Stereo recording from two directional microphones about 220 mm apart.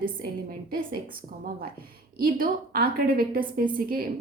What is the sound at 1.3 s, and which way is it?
A woman's voice, 40° right (ahead or behind).